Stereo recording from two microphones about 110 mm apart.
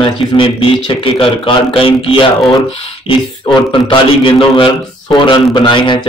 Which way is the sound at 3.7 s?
50° left (ahead or behind).